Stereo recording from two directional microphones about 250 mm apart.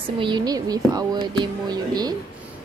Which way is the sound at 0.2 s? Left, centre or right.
Centre.